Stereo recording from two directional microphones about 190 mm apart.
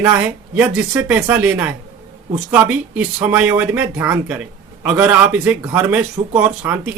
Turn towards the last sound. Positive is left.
turn(degrees=-15)  # may be behind; listen again after turning